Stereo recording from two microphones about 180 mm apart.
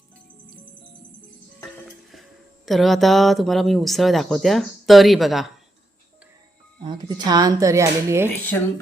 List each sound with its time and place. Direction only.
2.6 s speech: centre (ahead or behind)
6.8 s speech: 20° right (ahead or behind)